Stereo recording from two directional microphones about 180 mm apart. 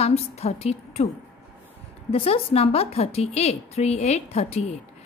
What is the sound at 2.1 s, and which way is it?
A woman's voice, 30° left (ahead or behind).